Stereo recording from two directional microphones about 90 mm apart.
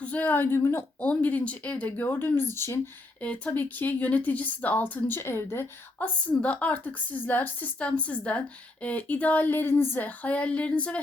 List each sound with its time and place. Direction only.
0.0 s speech: 15° left (ahead or behind)
1.0 s speech: 15° left (ahead or behind)
6.0 s a woman's voice: 15° left (ahead or behind)